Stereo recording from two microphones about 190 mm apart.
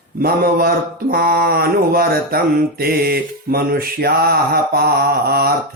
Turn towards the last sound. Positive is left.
turn(degrees=-55)  # may be behind; listen again after turning